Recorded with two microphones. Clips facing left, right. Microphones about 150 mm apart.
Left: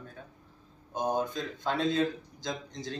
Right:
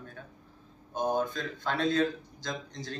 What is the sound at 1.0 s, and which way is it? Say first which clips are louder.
Speech: right 1 dB; 15° left (ahead or behind).